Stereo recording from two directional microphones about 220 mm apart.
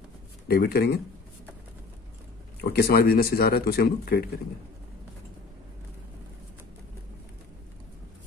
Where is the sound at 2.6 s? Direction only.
45° left (ahead or behind).